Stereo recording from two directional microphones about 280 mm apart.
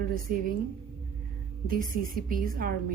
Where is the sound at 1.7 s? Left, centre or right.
Right.